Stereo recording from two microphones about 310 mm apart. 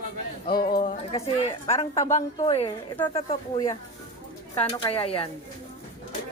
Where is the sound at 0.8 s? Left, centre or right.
Left.